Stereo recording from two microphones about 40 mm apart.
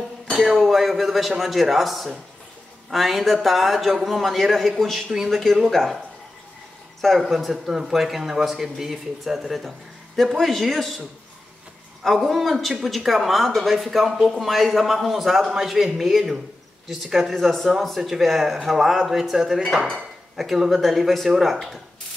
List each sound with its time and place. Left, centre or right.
0.3 s speech: centre
7.0 s speech: centre
7.5 s speech: centre
12.3 s speech: centre